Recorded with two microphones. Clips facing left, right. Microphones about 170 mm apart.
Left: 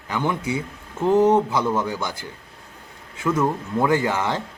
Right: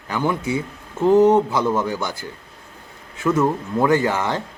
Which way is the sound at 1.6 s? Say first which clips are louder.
Right 2 dB; 10° right (ahead or behind).